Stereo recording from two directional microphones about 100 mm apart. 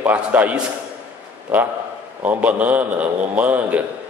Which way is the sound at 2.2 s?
15° right (ahead or behind).